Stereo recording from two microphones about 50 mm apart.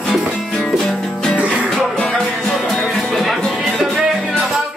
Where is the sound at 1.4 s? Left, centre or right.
Right.